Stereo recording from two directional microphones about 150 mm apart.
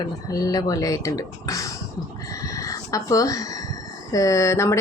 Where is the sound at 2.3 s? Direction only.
20° left (ahead or behind).